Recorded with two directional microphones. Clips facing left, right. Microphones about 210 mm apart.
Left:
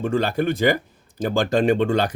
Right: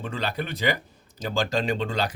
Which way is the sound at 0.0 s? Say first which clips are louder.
Left 9 dB; 50° left (ahead or behind).